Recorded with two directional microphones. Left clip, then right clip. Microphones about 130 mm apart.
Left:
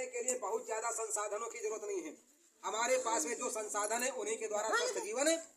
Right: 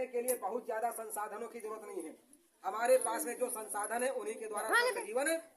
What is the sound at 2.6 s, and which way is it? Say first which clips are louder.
A man's voice: right 4 dB; 20° right (ahead or behind).